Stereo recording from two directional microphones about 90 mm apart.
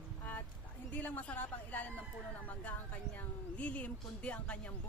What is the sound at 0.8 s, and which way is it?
A woman's voice, 15° left (ahead or behind).